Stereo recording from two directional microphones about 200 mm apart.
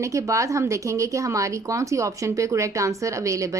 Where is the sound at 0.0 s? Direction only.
15° right (ahead or behind).